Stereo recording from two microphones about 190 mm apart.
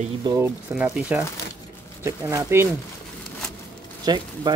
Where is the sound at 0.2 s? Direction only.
20° right (ahead or behind).